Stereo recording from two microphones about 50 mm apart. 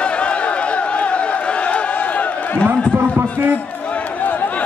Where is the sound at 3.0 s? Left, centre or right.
Right.